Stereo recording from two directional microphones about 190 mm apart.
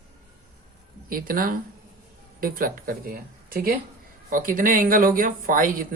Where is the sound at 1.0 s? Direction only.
50° right (ahead or behind).